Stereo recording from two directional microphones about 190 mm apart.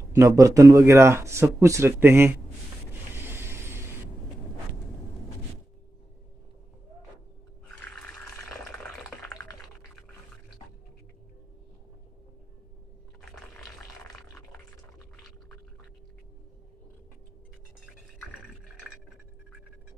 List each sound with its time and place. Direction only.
0.1 s speech: 15° right (ahead or behind)
3.2 s vehicle: 10° right (ahead or behind)
7.8 s water: 5° left (ahead or behind)
9.3 s typing: 15° left (ahead or behind)
13.3 s water: 5° left (ahead or behind)